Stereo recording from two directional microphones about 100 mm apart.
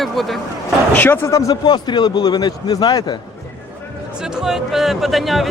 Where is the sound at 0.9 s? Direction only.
20° left (ahead or behind); by 3.1 s 40° left (ahead or behind).